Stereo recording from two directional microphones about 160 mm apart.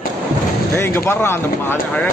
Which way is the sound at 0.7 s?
15° left (ahead or behind).